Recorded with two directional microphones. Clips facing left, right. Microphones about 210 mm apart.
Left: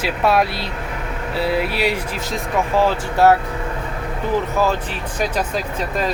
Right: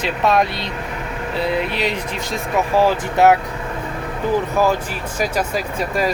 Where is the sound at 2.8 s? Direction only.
15° right (ahead or behind).